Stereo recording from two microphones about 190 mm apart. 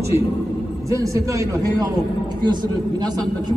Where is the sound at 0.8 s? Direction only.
15° right (ahead or behind).